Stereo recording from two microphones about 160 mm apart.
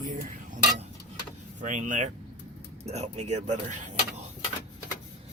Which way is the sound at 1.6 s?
50° right (ahead or behind).